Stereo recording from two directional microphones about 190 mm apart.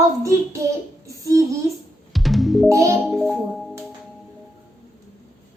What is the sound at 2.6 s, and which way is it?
Music, 15° right (ahead or behind).